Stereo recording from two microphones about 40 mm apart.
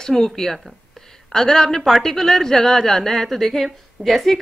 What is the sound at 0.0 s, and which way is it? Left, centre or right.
A woman's voice, centre.